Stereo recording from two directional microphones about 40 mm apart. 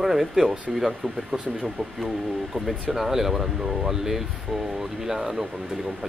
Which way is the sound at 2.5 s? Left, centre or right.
Centre.